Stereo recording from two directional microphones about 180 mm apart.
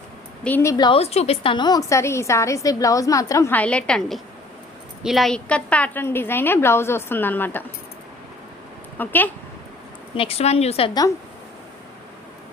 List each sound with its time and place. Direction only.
0.4 s a woman's voice: 15° left (ahead or behind)
9.0 s a woman's voice: 10° left (ahead or behind)
10.2 s a woman's voice: 35° left (ahead or behind)